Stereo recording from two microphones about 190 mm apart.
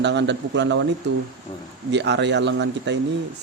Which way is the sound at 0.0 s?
65° right (ahead or behind).